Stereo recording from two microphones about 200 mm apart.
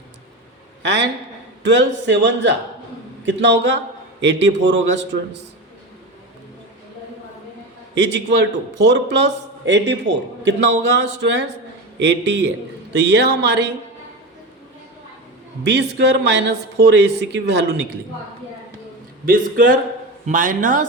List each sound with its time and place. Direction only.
0.8 s a man's voice: 60° right (ahead or behind)
7.9 s a man's voice: 60° right (ahead or behind)
15.6 s a man's voice: 60° right (ahead or behind)
19.2 s a man's voice: 45° right (ahead or behind)